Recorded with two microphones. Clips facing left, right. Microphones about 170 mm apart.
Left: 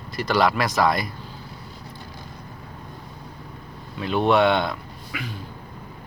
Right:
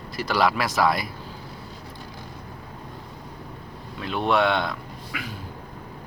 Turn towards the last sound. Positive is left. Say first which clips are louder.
# left 1 dB
turn(degrees=0)  # may be behind; listen again after turning